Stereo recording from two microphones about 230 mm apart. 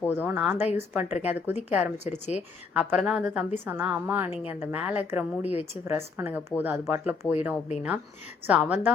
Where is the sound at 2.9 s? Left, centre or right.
Centre.